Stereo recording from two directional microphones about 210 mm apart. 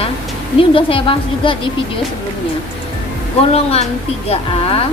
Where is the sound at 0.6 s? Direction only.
25° left (ahead or behind).